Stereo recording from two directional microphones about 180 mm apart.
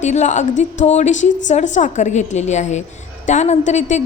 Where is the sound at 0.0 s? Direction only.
40° left (ahead or behind).